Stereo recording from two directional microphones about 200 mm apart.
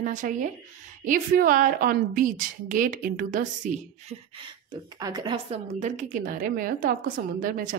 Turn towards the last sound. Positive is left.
turn(degrees=-45)  # may be behind; listen again after turning